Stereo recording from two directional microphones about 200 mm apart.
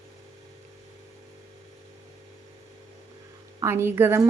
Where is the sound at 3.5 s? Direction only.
10° right (ahead or behind).